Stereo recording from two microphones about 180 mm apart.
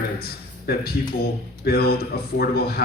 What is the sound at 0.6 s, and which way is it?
A man's voice, 60° left (ahead or behind).